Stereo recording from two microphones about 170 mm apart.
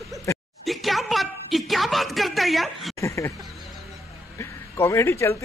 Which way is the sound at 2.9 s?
20° left (ahead or behind).